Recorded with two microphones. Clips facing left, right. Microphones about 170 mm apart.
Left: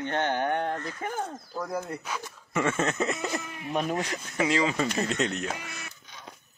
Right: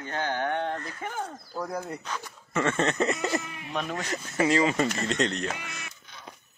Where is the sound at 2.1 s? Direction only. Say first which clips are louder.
Left 1 dB; 10° left (ahead or behind).